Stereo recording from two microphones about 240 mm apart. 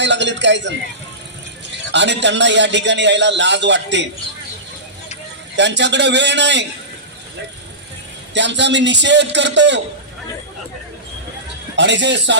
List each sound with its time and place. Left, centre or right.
0.0 s a man's voice: right
1.9 s a man's voice: right
5.5 s a man's voice: right
8.3 s a man's voice: right
11.8 s a man's voice: right